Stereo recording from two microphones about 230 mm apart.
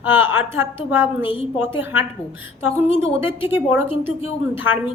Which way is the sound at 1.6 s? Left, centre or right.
Centre.